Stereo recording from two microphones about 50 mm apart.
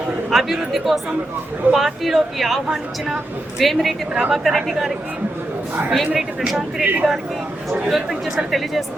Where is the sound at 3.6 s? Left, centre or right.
Centre.